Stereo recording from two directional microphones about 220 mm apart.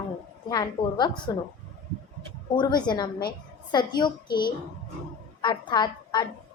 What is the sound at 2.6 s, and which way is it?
A woman's voice, 20° left (ahead or behind).